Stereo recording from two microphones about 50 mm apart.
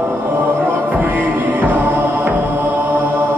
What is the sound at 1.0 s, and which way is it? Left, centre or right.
Music, right.